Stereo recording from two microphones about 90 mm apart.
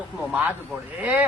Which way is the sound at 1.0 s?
15° right (ahead or behind).